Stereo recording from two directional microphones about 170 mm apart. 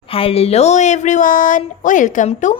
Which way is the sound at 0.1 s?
35° left (ahead or behind).